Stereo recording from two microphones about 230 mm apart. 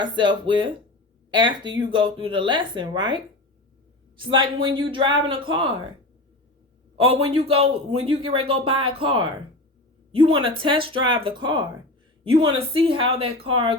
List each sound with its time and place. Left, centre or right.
0.0 s a man's voice: right
4.2 s a man's voice: right
6.9 s a man's voice: right